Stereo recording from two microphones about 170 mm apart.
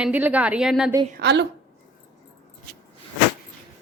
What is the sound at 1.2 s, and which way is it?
Speech, 90° right.